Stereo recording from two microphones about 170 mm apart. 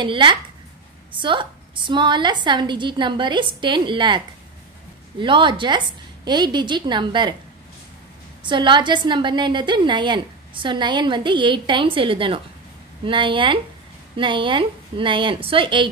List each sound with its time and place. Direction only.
0.0 s a woman's voice: 30° right (ahead or behind)
5.2 s a woman's voice: 30° right (ahead or behind)
8.5 s a woman's voice: 30° right (ahead or behind)